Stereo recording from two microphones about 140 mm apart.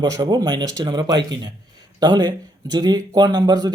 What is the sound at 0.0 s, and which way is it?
Speech, 30° right (ahead or behind).